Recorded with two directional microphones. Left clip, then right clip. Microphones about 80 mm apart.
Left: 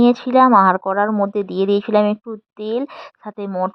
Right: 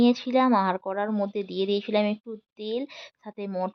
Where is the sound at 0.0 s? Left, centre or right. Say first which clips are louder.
Left 9 dB; left.